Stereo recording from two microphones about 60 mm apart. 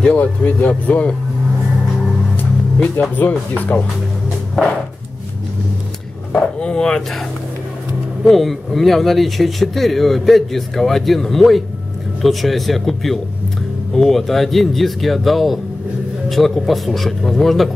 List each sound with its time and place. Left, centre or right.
0.0 s speech: left
3.0 s speech: left
4.6 s speech: centre
6.6 s speech: centre
8.3 s speech: centre